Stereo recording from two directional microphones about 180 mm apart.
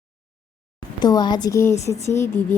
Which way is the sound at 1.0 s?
25° left (ahead or behind).